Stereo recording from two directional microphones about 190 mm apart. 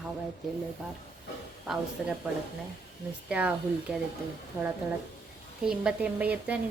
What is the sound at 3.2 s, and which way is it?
Speech, 5° right (ahead or behind).